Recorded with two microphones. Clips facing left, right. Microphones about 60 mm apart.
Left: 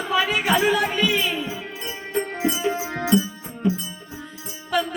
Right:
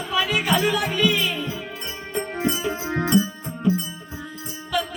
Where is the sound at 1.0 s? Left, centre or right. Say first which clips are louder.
Even; centre.